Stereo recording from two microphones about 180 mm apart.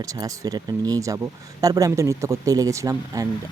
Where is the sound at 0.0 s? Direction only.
20° right (ahead or behind).